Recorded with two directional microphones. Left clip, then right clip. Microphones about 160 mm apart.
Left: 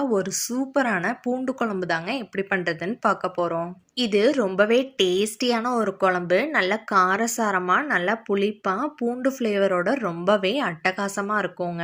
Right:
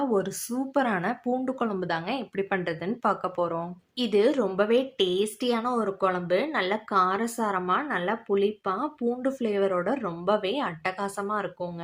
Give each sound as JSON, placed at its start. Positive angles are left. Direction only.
{"t": 0.0, "sound": "speech", "side_deg": 10}